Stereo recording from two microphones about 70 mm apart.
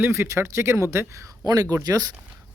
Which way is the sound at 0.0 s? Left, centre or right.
Right.